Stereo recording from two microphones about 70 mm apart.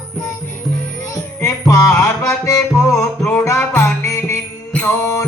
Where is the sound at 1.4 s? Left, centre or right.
Left.